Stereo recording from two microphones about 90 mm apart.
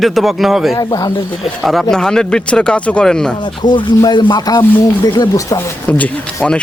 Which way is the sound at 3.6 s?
55° left (ahead or behind).